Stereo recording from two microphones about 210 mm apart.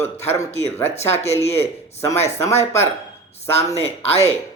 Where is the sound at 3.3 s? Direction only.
30° left (ahead or behind).